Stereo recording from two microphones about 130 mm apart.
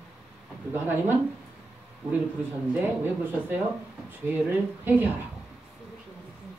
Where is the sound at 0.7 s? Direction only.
15° right (ahead or behind).